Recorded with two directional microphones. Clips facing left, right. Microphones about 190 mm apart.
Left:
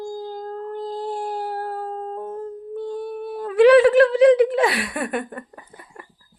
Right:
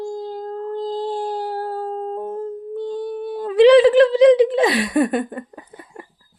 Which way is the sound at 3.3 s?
20° right (ahead or behind).